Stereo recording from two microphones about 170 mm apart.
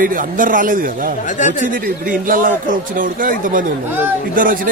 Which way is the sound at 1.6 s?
55° right (ahead or behind).